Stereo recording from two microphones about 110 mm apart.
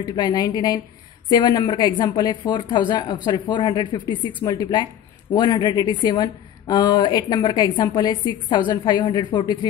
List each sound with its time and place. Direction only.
0.0 s a woman's voice: 40° left (ahead or behind)